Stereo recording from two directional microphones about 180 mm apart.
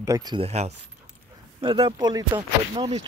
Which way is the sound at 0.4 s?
35° right (ahead or behind).